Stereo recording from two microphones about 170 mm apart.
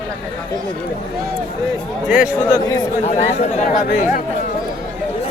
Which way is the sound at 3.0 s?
45° left (ahead or behind).